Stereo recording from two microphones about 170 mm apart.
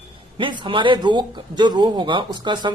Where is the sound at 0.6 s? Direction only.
30° right (ahead or behind).